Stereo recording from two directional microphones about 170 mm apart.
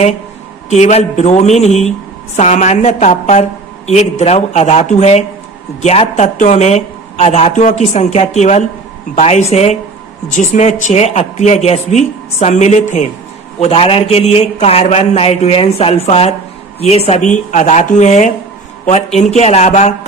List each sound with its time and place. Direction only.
0.7 s a woman's voice: 40° left (ahead or behind)
13.6 s speech: 35° left (ahead or behind)